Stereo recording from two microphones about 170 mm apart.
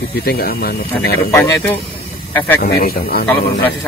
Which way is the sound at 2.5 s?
70° left (ahead or behind).